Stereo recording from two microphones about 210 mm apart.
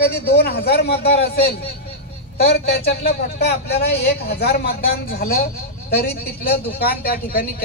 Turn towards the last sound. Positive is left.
turn(degrees=45)  # may be behind; listen again after turning